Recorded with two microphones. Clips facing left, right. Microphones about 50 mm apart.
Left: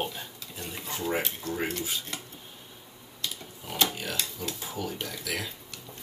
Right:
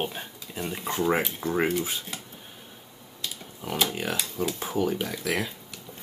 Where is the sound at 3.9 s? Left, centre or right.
Right.